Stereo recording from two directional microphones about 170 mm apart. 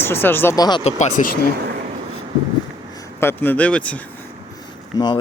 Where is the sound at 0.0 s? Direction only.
15° left (ahead or behind).